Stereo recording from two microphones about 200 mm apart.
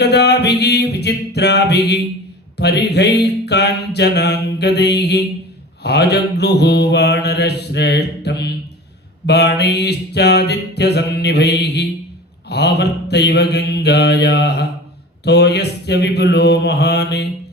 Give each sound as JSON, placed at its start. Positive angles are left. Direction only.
{"t": 0.0, "sound": "music", "side_deg": 55}
{"t": 2.6, "sound": "mantra", "side_deg": 55}